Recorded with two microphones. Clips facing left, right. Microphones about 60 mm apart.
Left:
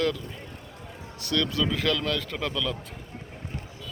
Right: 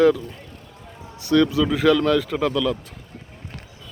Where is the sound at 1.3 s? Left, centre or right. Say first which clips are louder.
Right 9 dB; centre.